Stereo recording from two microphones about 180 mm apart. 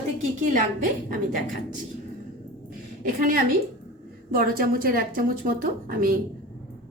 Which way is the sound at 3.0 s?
50° right (ahead or behind).